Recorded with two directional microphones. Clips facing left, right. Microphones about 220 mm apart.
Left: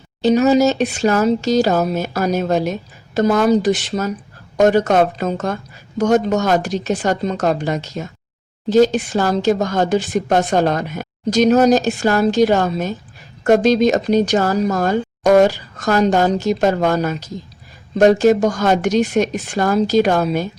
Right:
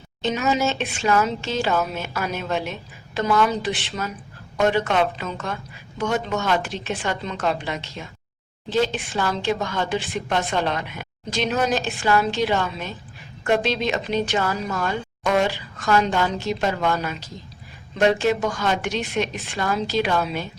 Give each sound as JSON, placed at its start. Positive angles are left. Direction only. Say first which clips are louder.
{"t": 0.2, "sound": "a woman's voice", "louder": "left 10 dB", "side_deg": 35}